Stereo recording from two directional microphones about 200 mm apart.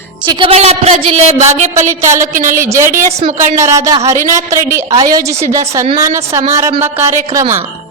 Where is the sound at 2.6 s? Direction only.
15° right (ahead or behind).